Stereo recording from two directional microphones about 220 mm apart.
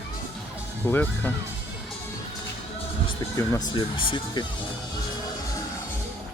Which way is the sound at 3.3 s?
10° left (ahead or behind).